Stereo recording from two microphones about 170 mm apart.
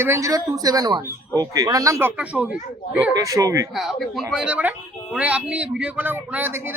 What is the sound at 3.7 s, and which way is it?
A man's voice, centre (ahead or behind).